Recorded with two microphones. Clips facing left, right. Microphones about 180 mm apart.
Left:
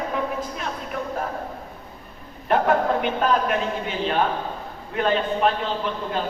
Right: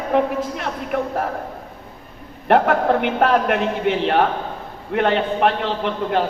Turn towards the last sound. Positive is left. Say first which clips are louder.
# right 5 dB
turn(degrees=-70)  # may be behind; listen again after turning